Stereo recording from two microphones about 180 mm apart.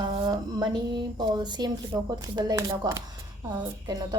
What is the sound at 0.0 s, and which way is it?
A woman's voice, 20° right (ahead or behind).